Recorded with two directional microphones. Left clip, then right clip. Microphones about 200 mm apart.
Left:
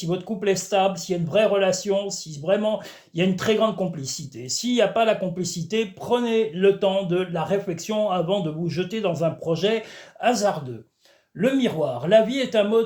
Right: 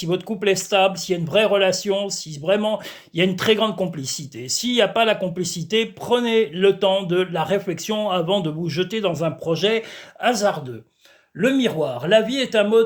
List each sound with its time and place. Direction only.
0.0 s a man's voice: 40° right (ahead or behind)